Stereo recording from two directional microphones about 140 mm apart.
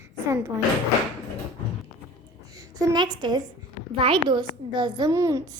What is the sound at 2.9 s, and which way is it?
A child's voice, 30° right (ahead or behind).